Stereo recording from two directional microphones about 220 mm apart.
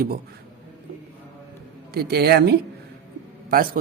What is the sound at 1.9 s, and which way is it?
Speech, 45° right (ahead or behind).